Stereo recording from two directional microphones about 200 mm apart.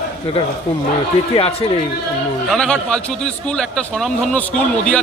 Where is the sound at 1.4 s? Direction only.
30° left (ahead or behind).